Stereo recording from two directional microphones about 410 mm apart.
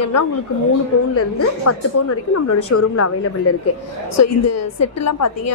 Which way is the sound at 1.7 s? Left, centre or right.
Left.